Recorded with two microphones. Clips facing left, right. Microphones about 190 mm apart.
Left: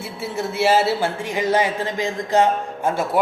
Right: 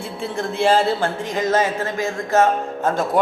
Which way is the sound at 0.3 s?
5° left (ahead or behind).